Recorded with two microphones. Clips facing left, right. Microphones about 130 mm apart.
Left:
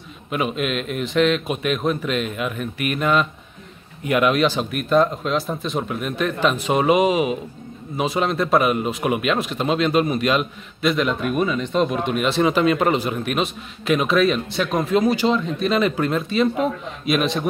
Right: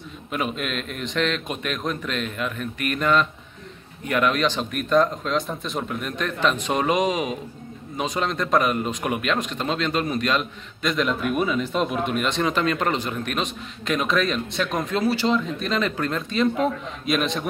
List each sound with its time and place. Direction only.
0.3 s speech: 5° left (ahead or behind)
15.0 s speech: 15° left (ahead or behind)
15.3 s a man's voice: centre (ahead or behind)